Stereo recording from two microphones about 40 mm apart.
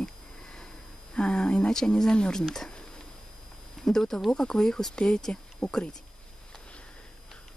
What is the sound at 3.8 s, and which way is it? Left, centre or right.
Speech, centre.